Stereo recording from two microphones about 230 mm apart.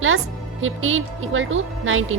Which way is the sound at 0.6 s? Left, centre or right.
Right.